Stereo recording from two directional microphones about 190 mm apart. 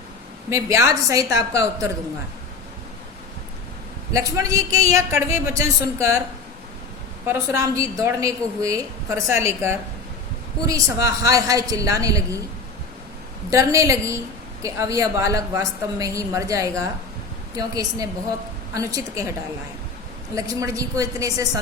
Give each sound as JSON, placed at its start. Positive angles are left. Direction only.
{"t": 0.5, "sound": "a woman's voice", "side_deg": -15}
{"t": 4.1, "sound": "a woman's voice", "side_deg": -15}
{"t": 7.3, "sound": "a woman's voice", "side_deg": -15}
{"t": 13.5, "sound": "a woman's voice", "side_deg": -15}
{"t": 20.3, "sound": "a woman's voice", "side_deg": -15}